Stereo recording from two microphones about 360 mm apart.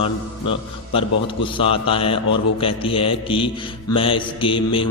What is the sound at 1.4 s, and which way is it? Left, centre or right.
Speech, centre.